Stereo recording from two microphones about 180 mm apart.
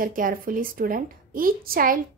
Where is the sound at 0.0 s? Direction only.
50° right (ahead or behind).